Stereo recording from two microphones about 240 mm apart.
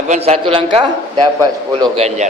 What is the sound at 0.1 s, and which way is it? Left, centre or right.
A man's voice, right.